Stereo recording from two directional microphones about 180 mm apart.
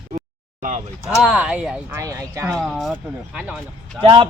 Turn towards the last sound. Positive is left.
turn(degrees=-30)  # may be behind; listen again after turning